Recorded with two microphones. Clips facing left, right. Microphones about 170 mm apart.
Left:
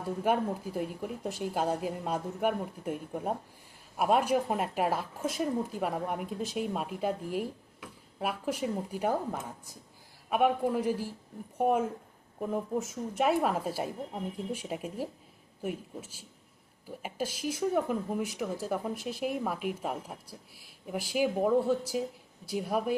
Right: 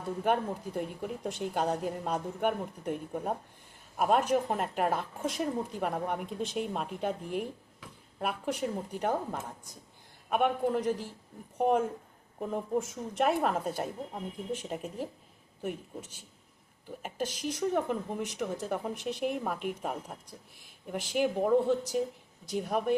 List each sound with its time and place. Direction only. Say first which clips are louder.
0.3 s a woman's voice: left 1 dB; 5° left (ahead or behind)